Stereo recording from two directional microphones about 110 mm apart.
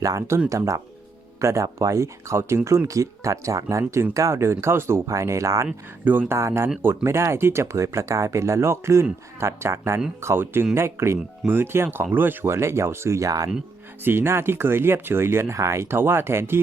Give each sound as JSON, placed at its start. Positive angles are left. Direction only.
{"t": 0.0, "sound": "speech", "side_deg": -30}
{"t": 14.0, "sound": "speech", "side_deg": -20}